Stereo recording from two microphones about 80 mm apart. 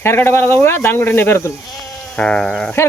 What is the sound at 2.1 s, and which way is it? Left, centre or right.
Sheep, centre.